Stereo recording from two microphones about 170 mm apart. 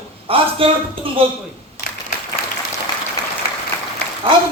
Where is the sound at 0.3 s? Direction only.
35° right (ahead or behind).